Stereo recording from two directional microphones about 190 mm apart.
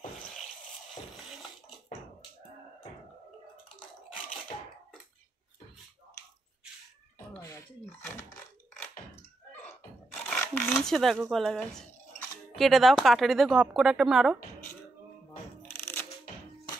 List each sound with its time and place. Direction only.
7.3 s throat clearing: 15° left (ahead or behind)
9.7 s a sound: 5° left (ahead or behind)
12.5 s speech: centre (ahead or behind)
15.8 s music: 10° left (ahead or behind)